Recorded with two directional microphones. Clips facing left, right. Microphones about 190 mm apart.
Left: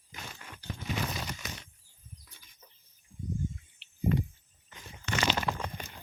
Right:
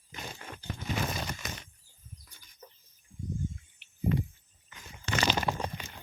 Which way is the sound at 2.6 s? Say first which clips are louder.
Right 10 dB; 55° right (ahead or behind).